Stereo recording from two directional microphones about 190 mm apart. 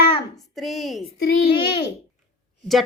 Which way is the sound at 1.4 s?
25° left (ahead or behind).